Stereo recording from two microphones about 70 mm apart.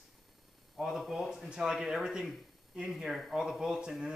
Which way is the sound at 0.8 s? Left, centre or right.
Centre.